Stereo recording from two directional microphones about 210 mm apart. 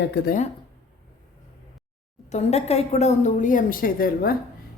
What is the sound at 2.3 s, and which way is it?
A woman's voice, 30° left (ahead or behind).